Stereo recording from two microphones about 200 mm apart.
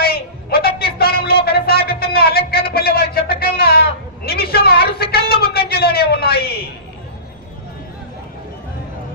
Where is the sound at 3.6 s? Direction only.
50° left (ahead or behind).